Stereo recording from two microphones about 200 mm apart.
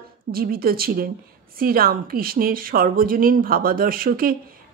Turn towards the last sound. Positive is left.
turn(degrees=-45)  # may be behind; listen again after turning